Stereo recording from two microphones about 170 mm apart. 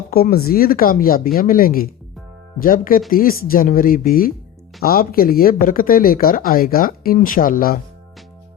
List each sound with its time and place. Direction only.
0.1 s speech: 60° left (ahead or behind)